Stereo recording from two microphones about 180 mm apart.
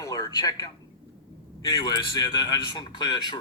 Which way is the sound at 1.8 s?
25° left (ahead or behind).